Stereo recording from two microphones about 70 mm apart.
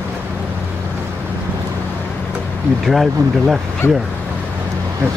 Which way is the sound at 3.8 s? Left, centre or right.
Left.